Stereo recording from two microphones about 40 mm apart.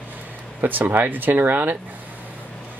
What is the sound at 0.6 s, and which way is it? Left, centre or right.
Speech, right.